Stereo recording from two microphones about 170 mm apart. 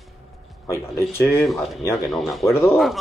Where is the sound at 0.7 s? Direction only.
15° left (ahead or behind).